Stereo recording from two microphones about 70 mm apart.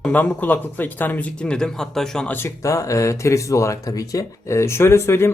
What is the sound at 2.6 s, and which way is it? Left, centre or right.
Speech, left.